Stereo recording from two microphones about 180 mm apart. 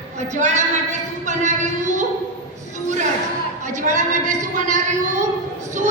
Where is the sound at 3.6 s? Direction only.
45° right (ahead or behind).